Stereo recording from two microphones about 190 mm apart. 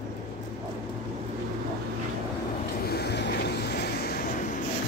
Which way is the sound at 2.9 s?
60° left (ahead or behind).